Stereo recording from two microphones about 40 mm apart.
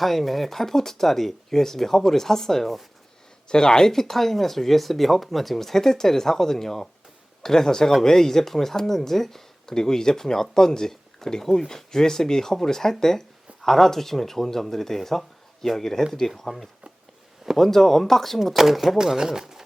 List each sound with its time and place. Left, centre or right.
0.0 s speech: centre
18.5 s speech: centre
18.9 s speech: centre